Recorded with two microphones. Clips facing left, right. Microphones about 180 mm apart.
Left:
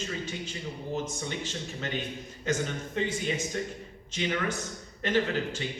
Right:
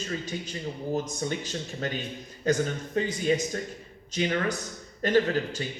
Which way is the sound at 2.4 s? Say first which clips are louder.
Right 5 dB; 40° right (ahead or behind).